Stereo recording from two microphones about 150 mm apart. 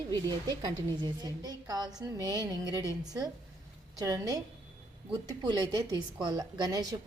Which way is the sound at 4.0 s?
25° right (ahead or behind).